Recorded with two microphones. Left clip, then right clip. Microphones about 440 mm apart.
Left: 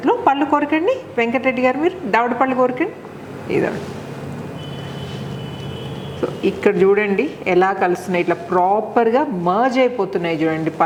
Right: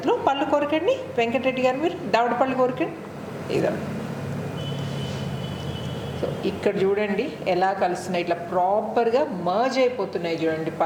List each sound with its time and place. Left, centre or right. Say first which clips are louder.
0.0 s a woman's voice: left 6 dB; left
6.4 s a woman's voice: left 8 dB; left